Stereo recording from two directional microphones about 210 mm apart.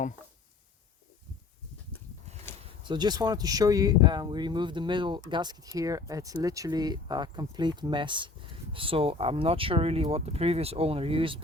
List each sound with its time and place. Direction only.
2.8 s speech: 20° right (ahead or behind)